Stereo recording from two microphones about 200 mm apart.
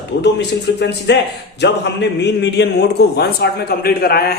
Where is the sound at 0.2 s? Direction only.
60° left (ahead or behind).